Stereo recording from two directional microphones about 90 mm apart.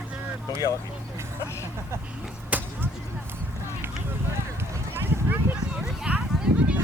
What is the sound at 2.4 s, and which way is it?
Vehicle, 20° right (ahead or behind).